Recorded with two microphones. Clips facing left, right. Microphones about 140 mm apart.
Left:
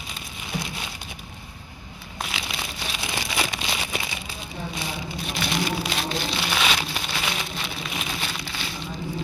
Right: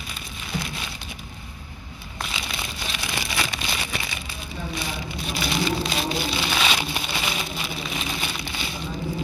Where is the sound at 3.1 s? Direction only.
20° left (ahead or behind).